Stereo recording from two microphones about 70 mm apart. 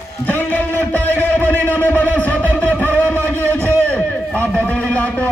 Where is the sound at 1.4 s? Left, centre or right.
Left.